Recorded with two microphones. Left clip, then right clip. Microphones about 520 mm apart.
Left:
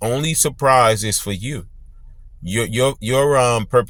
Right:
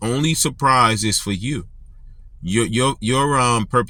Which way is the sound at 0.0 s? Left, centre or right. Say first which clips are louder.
Left 1 dB; left.